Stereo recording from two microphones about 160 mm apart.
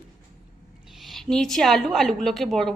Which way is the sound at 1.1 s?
Centre (ahead or behind).